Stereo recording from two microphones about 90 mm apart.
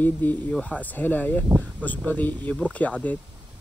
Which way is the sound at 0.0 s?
20° left (ahead or behind).